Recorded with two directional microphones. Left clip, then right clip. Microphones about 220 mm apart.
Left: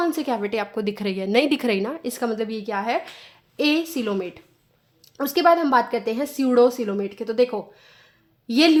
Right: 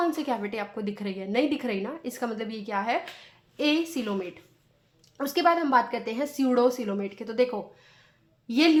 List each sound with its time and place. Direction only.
0.0 s a woman's voice: 30° left (ahead or behind)